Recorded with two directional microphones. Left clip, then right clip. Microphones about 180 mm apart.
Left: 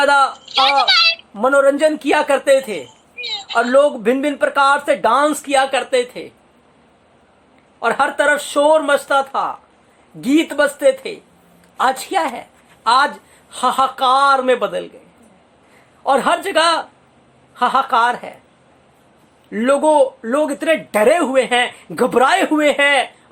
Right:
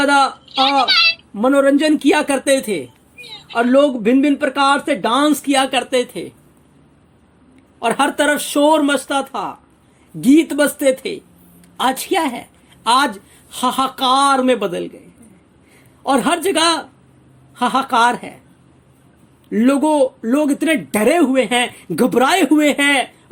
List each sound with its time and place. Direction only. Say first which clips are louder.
0.0 s speech: left 1 dB; 30° right (ahead or behind)
0.4 s a sound: left 1 dB; 45° left (ahead or behind)
1.4 s speech: left 1 dB; 30° right (ahead or behind)
3.2 s a sound: left 10 dB; 45° left (ahead or behind)
3.5 s speech: even; 30° right (ahead or behind)
7.8 s a woman's voice: even; 40° right (ahead or behind)
16.0 s speech: left 1 dB; 35° right (ahead or behind)
19.5 s speech: left 2 dB; 35° right (ahead or behind)